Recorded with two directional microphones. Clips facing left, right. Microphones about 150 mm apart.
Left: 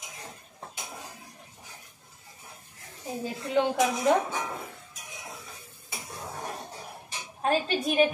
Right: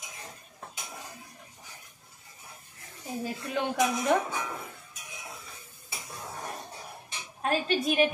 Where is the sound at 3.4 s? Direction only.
20° left (ahead or behind).